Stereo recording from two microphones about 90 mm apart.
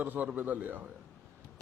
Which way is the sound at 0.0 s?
20° right (ahead or behind).